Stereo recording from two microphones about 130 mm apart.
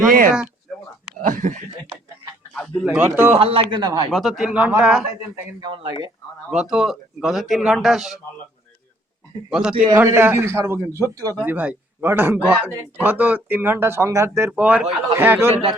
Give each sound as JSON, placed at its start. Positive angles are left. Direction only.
{"t": 0.1, "sound": "speech", "side_deg": -90}
{"t": 2.6, "sound": "a man's voice", "side_deg": -5}
{"t": 3.0, "sound": "a man's voice", "side_deg": -20}
{"t": 3.3, "sound": "speech", "side_deg": -45}
{"t": 4.1, "sound": "a man's voice", "side_deg": -5}
{"t": 5.5, "sound": "speech", "side_deg": -35}
{"t": 6.5, "sound": "a man's voice", "side_deg": -5}
{"t": 9.5, "sound": "a man's voice", "side_deg": -5}
{"t": 9.9, "sound": "a man's voice", "side_deg": -20}
{"t": 11.4, "sound": "a man's voice", "side_deg": -10}